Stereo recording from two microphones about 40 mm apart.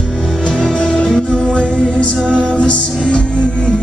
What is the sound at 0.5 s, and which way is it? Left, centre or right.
Music, centre.